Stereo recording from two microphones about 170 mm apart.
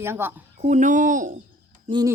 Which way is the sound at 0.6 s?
45° right (ahead or behind).